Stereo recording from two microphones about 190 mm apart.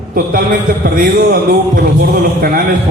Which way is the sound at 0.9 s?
50° right (ahead or behind).